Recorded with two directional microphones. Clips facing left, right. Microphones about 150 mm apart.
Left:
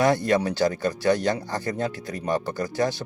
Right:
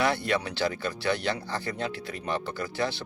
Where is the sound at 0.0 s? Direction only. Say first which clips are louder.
Left 6 dB; 45° left (ahead or behind).